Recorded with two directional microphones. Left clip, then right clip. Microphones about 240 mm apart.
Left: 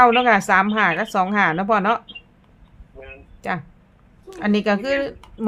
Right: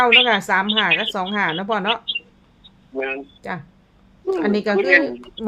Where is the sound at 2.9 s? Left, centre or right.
Right.